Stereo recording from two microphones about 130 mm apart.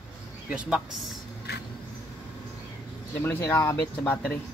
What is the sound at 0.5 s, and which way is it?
Speech, 10° right (ahead or behind).